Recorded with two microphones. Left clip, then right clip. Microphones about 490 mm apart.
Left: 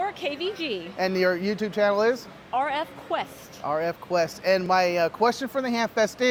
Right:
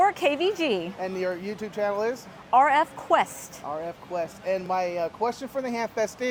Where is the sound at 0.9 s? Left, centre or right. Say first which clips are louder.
Left 6 dB; left.